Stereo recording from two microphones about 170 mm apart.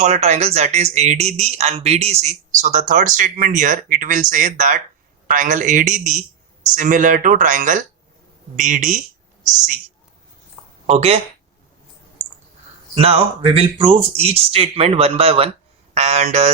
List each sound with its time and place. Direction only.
0.0 s speech: 40° right (ahead or behind)
10.8 s speech: 40° right (ahead or behind)
12.9 s speech: 35° right (ahead or behind)